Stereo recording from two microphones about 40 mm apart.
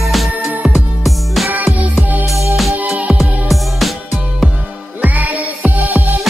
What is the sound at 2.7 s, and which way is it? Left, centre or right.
Music, right.